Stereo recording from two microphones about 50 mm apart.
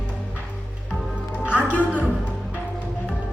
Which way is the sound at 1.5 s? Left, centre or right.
Left.